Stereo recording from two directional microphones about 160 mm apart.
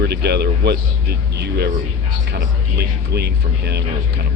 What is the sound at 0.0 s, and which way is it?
Speech, 90° right.